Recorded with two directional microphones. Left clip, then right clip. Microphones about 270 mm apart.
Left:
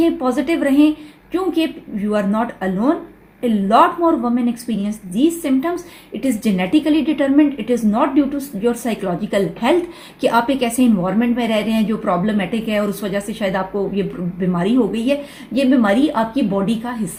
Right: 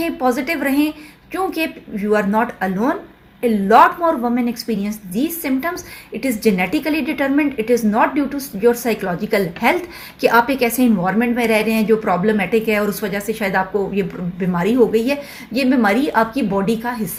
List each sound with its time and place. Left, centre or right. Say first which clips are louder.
0.0 s a woman's voice: left 1 dB; right